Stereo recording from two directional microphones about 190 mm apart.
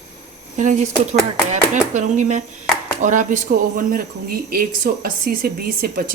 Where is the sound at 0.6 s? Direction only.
40° right (ahead or behind).